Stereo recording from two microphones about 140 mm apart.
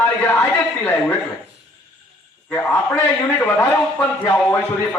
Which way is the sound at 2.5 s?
15° left (ahead or behind).